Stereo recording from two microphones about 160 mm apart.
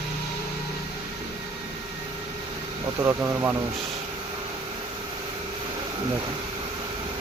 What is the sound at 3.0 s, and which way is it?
Speech, 15° right (ahead or behind).